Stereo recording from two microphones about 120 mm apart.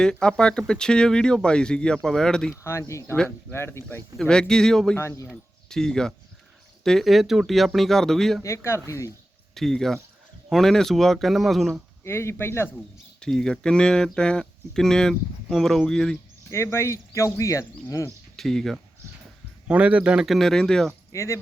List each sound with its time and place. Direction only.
0.0 s speech: 5° left (ahead or behind)
2.6 s speech: 25° left (ahead or behind)
4.2 s speech: 5° left (ahead or behind)
4.9 s speech: 20° left (ahead or behind)
5.3 s speech: 5° left (ahead or behind)
8.4 s speech: 25° left (ahead or behind)
9.6 s speech: 5° left (ahead or behind)
12.0 s speech: 20° left (ahead or behind)
13.1 s speech: 5° left (ahead or behind)
16.5 s speech: 20° left (ahead or behind)
18.3 s speech: centre (ahead or behind)
19.6 s speech: 10° right (ahead or behind)
21.1 s speech: 25° left (ahead or behind)